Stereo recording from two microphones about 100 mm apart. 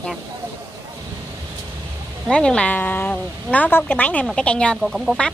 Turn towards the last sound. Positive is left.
turn(degrees=-5)  # may be behind; listen again after turning